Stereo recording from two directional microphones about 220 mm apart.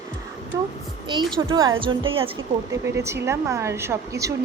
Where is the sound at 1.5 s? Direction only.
20° right (ahead or behind).